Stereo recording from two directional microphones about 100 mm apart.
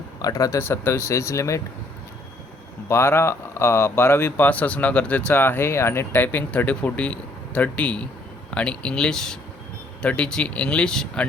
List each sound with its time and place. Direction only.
0.2 s speech: 35° left (ahead or behind)
0.6 s speech: 25° left (ahead or behind)
2.9 s speech: 25° left (ahead or behind); by 11.3 s 5° left (ahead or behind)